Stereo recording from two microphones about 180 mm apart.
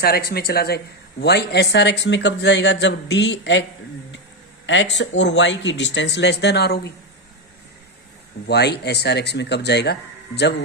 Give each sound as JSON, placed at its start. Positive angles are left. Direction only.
{"t": 0.0, "sound": "speech", "side_deg": 60}
{"t": 8.4, "sound": "speech", "side_deg": 65}